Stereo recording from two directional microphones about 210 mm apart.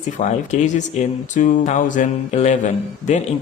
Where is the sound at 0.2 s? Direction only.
35° left (ahead or behind).